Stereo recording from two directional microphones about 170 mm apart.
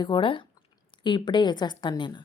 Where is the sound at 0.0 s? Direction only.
30° left (ahead or behind).